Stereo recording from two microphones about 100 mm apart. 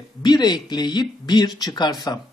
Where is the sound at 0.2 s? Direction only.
45° left (ahead or behind).